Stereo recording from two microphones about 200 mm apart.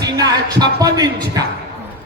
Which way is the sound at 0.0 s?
20° right (ahead or behind).